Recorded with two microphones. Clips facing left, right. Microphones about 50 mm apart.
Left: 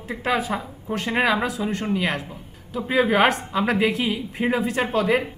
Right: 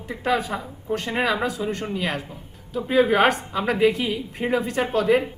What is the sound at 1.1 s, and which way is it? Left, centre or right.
Speech, centre.